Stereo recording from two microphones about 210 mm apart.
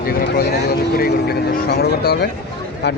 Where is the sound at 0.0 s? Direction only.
45° left (ahead or behind).